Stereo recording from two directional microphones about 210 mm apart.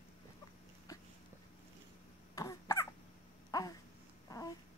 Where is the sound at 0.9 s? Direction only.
15° left (ahead or behind).